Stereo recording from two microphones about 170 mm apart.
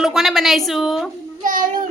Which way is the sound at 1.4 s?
50° right (ahead or behind).